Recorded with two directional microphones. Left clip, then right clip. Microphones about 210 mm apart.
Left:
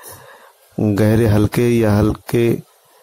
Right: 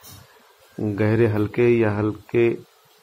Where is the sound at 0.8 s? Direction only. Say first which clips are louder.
Left 5 dB; 55° left (ahead or behind).